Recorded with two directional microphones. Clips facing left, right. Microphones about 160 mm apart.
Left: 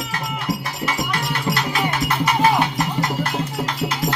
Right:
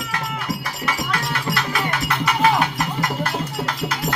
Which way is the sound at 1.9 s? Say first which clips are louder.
Left 2 dB; 30° left (ahead or behind).